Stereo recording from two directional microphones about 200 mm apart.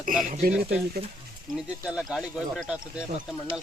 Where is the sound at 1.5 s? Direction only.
5° right (ahead or behind).